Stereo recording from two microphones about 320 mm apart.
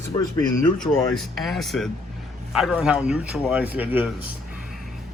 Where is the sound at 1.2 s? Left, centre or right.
Centre.